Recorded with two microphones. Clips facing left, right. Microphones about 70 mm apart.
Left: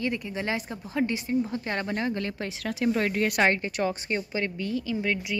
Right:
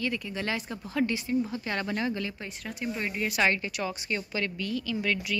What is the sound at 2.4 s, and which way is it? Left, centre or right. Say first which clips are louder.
Speech: left 7 dB; left.